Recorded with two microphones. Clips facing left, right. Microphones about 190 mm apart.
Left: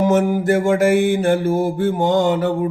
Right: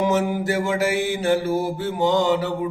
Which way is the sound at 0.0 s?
50° left (ahead or behind).